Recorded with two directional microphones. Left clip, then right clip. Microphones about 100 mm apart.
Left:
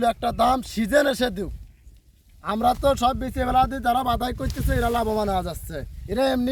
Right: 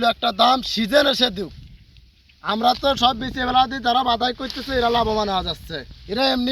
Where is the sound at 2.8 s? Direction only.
65° left (ahead or behind); by 3.6 s 90° left.